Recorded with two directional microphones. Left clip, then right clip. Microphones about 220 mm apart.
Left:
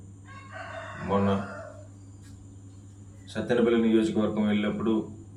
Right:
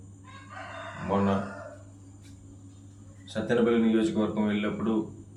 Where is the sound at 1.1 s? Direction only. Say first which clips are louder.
Left 1 dB; 5° left (ahead or behind).